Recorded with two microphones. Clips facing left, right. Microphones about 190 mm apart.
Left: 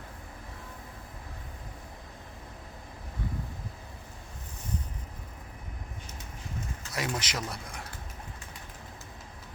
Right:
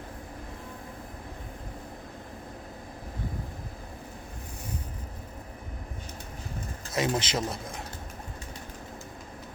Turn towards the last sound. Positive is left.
turn(degrees=-25)  # may be behind; listen again after turning